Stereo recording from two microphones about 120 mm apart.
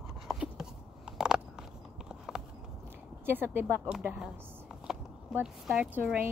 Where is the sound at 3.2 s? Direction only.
20° right (ahead or behind).